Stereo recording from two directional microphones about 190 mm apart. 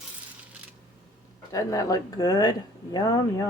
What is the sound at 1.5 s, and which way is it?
Speech, 20° left (ahead or behind).